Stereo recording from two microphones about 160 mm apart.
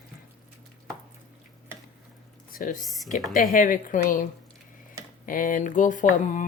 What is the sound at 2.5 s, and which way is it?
Speech, 55° left (ahead or behind).